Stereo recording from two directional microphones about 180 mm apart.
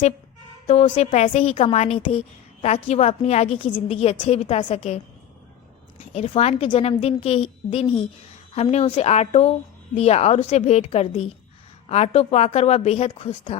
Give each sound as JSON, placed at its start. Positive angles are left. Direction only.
{"t": 0.7, "sound": "a woman's voice", "side_deg": 35}
{"t": 6.0, "sound": "a woman's voice", "side_deg": 30}